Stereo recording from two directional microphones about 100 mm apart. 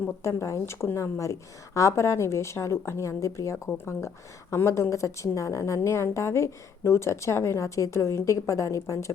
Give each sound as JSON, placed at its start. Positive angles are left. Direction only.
{"t": 0.2, "sound": "a woman's voice", "side_deg": 30}